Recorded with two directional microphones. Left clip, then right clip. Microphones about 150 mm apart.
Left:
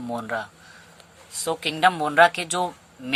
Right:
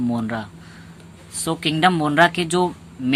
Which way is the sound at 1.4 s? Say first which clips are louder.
Right 2 dB; 15° left (ahead or behind).